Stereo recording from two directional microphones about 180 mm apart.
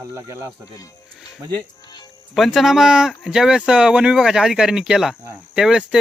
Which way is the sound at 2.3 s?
Centre (ahead or behind).